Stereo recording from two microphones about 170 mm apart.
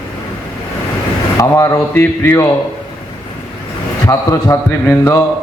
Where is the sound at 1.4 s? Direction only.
20° left (ahead or behind).